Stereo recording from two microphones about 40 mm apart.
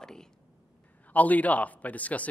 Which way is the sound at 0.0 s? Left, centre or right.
Centre.